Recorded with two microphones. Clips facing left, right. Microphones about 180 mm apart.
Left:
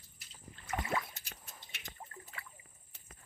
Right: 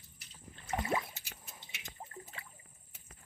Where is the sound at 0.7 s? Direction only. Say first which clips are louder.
Right 2 dB; 25° right (ahead or behind).